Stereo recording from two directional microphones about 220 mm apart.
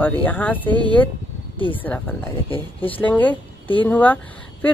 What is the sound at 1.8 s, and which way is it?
Speech, 10° left (ahead or behind).